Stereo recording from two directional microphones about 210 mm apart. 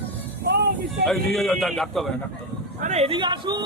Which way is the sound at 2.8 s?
30° right (ahead or behind).